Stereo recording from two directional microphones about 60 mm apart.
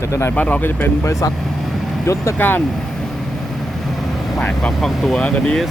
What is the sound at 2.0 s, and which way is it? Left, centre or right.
Speech, left.